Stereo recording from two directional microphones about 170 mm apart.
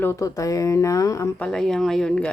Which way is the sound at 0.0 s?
15° left (ahead or behind).